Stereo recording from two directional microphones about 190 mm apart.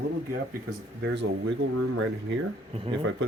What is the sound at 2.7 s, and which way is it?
Speech, 30° right (ahead or behind).